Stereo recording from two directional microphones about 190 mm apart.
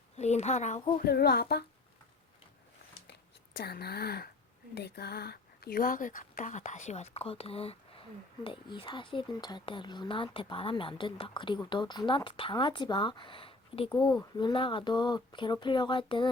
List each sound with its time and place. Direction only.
0.2 s speech: 35° left (ahead or behind)
1.0 s speech: 55° left (ahead or behind)
3.1 s a sound: 55° left (ahead or behind)
4.7 s speech: 60° left (ahead or behind); by 16.3 s 25° left (ahead or behind)